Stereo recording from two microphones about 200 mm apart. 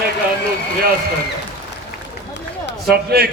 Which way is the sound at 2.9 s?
50° right (ahead or behind).